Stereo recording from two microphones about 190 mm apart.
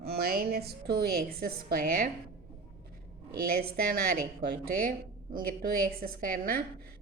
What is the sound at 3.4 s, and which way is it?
A woman's voice, 50° right (ahead or behind).